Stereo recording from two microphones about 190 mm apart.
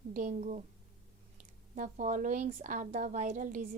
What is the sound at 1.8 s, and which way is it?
A woman's voice, 45° right (ahead or behind).